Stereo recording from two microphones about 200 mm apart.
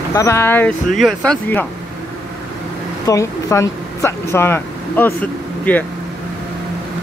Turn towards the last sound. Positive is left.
turn(degrees=10)  # may be behind; listen again after turning